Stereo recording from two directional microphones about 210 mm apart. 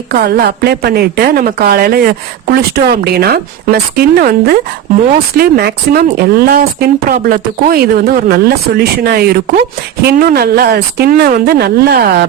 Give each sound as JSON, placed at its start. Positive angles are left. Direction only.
{"t": 0.2, "sound": "a woman's voice", "side_deg": -50}